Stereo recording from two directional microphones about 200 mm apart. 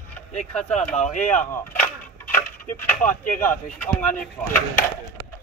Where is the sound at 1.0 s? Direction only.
40° left (ahead or behind).